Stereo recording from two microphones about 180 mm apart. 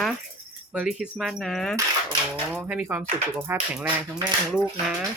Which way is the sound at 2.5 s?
10° right (ahead or behind).